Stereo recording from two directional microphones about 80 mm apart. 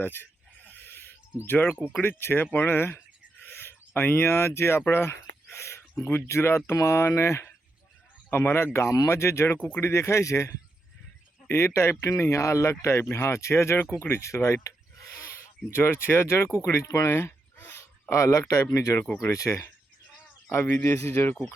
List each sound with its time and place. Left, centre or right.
0.0 s speech: left
0.6 s a sound: left
1.9 s speech: left
9.6 s speech: centre
9.8 s speech: left
17.1 s speech: left
20.5 s speech: left